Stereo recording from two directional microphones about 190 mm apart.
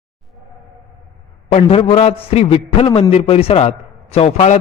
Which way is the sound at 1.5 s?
35° left (ahead or behind).